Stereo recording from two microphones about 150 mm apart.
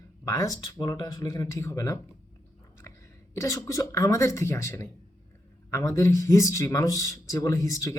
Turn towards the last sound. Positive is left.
turn(degrees=20)  # may be behind; listen again after turning